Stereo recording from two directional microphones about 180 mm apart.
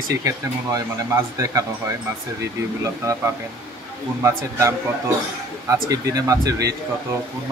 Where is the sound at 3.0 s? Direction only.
15° right (ahead or behind).